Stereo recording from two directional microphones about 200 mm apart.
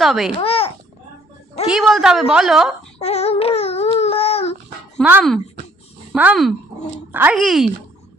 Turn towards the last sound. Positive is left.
turn(degrees=0)  # may be behind; listen again after turning